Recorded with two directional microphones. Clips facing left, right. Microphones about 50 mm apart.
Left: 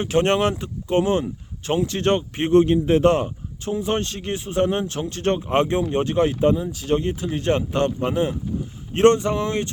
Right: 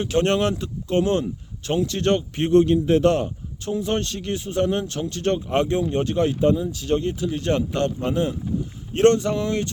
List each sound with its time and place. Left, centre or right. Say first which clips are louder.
0.0 s speech: left 1 dB; left